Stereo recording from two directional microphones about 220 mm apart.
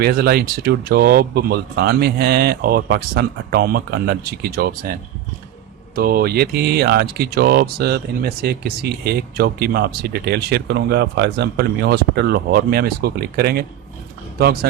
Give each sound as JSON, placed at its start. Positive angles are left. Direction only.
{"t": 0.0, "sound": "speech", "side_deg": -45}